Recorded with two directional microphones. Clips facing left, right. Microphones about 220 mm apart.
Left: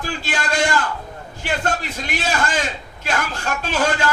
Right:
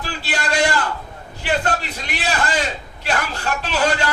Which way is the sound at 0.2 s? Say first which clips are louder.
Right 4 dB; 50° left (ahead or behind).